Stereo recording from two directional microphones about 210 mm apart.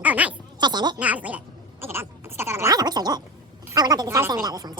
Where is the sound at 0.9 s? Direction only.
5° right (ahead or behind).